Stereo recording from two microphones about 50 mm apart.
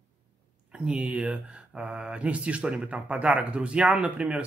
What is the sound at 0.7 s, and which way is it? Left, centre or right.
Speech, centre.